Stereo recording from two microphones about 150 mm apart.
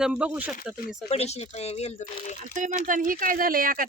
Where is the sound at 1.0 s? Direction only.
45° left (ahead or behind).